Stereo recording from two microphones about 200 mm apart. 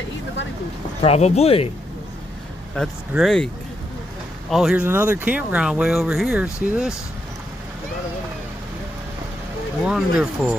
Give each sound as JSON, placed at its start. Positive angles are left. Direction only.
{"t": 1.0, "sound": "speech", "side_deg": 30}
{"t": 2.8, "sound": "speech", "side_deg": 5}
{"t": 4.5, "sound": "speech", "side_deg": 0}
{"t": 9.8, "sound": "speech", "side_deg": -5}